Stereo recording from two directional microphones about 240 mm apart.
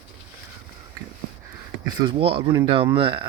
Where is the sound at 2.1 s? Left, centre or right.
Right.